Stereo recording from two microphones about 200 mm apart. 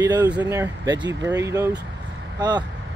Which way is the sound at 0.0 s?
20° right (ahead or behind).